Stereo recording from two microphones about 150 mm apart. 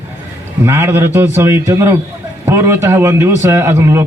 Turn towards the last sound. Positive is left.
turn(degrees=-20)  # may be behind; listen again after turning